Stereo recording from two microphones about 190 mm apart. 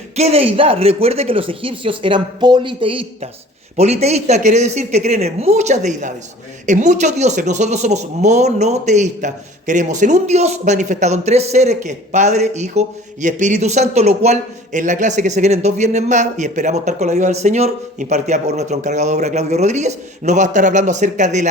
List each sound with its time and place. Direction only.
0.2 s speech: 30° right (ahead or behind)